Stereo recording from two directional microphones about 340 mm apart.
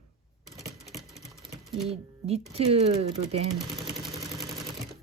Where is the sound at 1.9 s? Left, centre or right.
Centre.